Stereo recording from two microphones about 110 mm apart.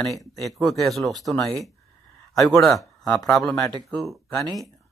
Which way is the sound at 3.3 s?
5° left (ahead or behind).